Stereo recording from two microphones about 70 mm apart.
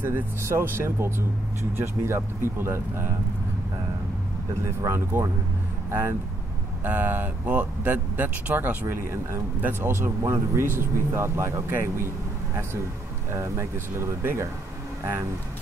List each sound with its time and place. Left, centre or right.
0.4 s speech: right
4.6 s speech: right
6.8 s speech: right
8.8 s speech: right
13.3 s speech: right